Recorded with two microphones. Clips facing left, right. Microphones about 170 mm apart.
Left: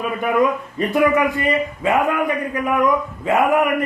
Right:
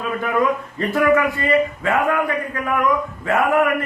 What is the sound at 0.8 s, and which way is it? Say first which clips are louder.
A man's voice: left 1 dB; 20° left (ahead or behind).